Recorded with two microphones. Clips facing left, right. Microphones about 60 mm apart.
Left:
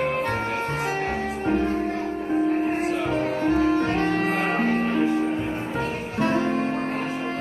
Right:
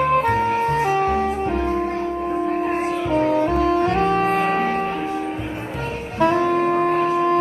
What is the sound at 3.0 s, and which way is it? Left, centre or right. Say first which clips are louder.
Saxophone: right 8 dB; right.